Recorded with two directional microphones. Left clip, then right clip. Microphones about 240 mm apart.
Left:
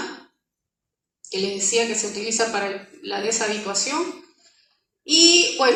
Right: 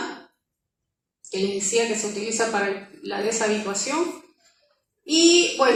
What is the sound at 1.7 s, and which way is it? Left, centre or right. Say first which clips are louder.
Speech: left 1 dB; left.